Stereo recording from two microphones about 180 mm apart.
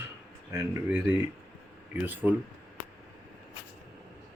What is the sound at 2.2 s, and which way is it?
Speech, 5° right (ahead or behind).